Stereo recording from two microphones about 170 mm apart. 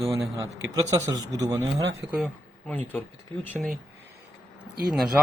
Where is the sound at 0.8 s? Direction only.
20° right (ahead or behind).